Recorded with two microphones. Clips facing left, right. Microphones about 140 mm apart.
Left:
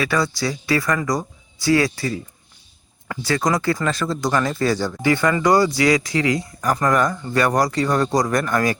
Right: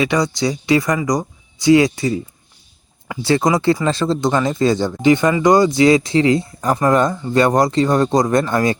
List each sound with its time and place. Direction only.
0.0 s speech: 20° right (ahead or behind)
3.2 s speech: 25° right (ahead or behind)